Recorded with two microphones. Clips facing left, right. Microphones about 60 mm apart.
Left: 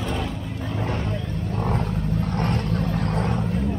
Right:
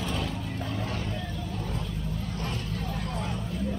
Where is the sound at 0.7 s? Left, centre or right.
Left.